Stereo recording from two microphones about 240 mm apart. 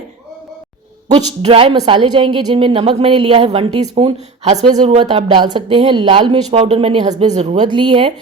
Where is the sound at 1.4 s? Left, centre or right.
Right.